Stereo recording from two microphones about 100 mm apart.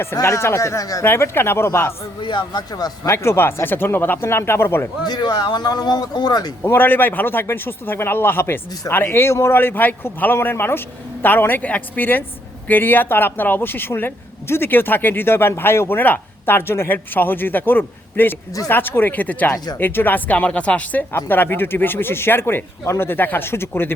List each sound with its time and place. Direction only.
0.0 s speech: 30° left (ahead or behind)
1.0 s speech: 25° left (ahead or behind)
2.2 s a man's voice: 50° left (ahead or behind)
3.1 s speech: 25° left (ahead or behind)
5.0 s a man's voice: 45° left (ahead or behind)
6.7 s speech: 20° left (ahead or behind)